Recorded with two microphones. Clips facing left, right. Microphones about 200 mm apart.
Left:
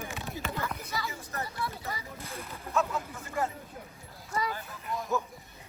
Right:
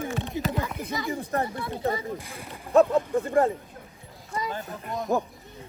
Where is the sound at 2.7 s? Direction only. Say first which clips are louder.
Right 12 dB; 35° right (ahead or behind).